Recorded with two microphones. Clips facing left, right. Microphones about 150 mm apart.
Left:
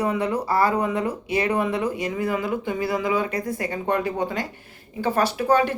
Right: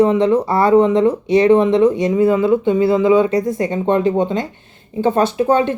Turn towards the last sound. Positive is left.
turn(degrees=-25)  # may be behind; listen again after turning